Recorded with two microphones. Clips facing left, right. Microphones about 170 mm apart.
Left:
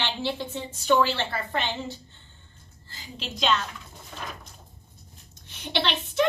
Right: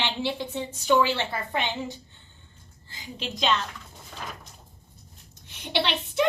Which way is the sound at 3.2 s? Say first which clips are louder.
Even; centre (ahead or behind).